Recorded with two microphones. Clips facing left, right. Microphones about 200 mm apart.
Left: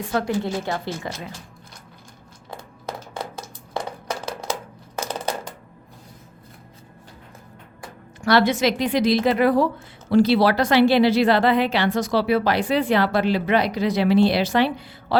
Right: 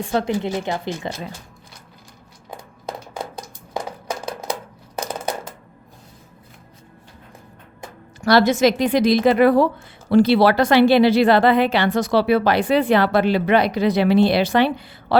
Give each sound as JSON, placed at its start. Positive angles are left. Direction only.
{"t": 0.1, "sound": "a woman's voice", "side_deg": -25}
{"t": 3.8, "sound": "a sound", "side_deg": -10}
{"t": 8.2, "sound": "a woman's voice", "side_deg": -40}